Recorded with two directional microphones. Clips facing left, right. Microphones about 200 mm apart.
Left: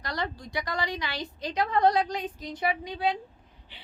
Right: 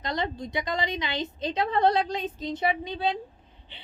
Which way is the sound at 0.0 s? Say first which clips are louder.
Right 3 dB; 20° right (ahead or behind).